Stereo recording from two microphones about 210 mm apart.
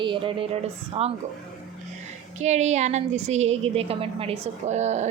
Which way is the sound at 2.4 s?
35° right (ahead or behind).